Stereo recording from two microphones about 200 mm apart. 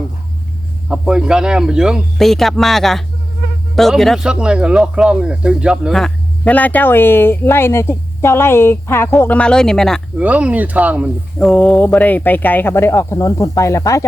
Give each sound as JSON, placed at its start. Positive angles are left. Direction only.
{"t": 0.9, "sound": "speech", "side_deg": -5}